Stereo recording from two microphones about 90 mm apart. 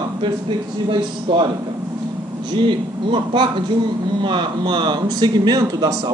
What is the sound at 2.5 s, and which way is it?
A man's voice, 65° right (ahead or behind).